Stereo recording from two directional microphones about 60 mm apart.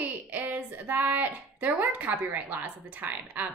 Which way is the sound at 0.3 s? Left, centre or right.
Right.